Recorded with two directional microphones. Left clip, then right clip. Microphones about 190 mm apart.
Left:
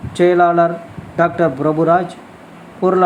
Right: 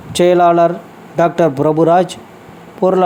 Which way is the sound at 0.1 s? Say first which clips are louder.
Right 2 dB; 25° right (ahead or behind).